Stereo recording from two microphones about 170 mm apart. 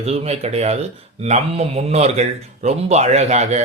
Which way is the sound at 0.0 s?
40° right (ahead or behind).